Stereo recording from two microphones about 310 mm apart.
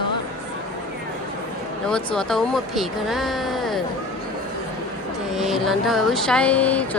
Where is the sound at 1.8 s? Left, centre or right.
Centre.